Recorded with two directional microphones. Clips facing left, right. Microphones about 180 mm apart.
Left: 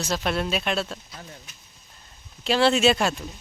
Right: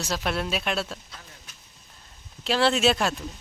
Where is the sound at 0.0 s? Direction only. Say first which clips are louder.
Left 2 dB; 5° right (ahead or behind).